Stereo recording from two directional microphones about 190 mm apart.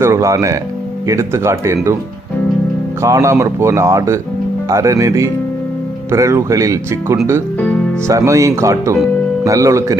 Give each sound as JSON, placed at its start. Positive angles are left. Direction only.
{"t": 0.0, "sound": "speech", "side_deg": -15}
{"t": 3.0, "sound": "speech", "side_deg": -15}